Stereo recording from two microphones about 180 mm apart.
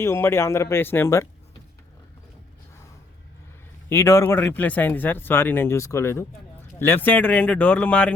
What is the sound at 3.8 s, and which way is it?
A man's voice, 15° left (ahead or behind).